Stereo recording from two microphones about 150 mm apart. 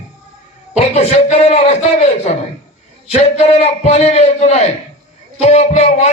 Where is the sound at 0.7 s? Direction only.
45° left (ahead or behind).